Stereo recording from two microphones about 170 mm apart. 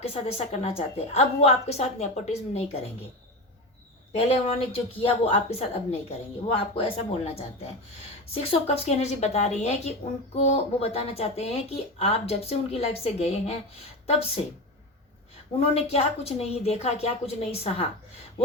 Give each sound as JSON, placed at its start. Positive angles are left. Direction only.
{"t": 0.0, "sound": "speech", "side_deg": 35}
{"t": 4.1, "sound": "speech", "side_deg": 35}
{"t": 15.6, "sound": "speech", "side_deg": 35}